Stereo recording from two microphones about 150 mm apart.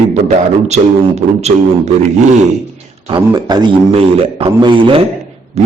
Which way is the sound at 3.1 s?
30° right (ahead or behind).